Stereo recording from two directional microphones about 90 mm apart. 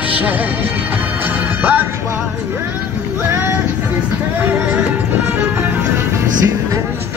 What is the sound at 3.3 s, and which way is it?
Music, 25° right (ahead or behind).